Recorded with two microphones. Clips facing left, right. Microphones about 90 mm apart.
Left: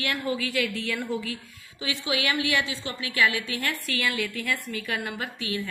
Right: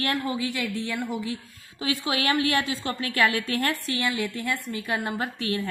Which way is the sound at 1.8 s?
40° right (ahead or behind).